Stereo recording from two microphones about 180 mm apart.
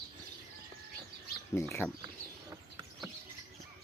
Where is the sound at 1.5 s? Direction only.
15° left (ahead or behind).